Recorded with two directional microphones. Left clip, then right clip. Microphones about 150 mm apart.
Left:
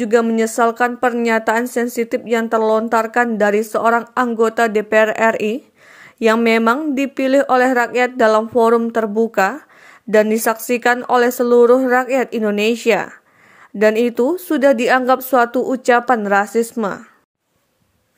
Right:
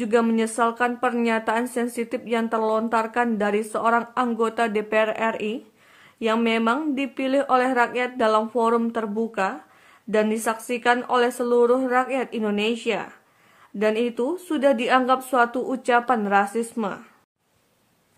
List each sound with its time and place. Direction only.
0.0 s speech: 25° left (ahead or behind)